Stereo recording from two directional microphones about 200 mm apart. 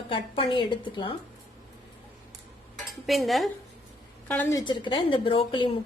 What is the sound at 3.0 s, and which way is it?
Cutlery, centre (ahead or behind).